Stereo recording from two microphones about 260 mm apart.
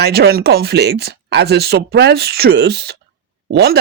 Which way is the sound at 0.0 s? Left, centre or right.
Right.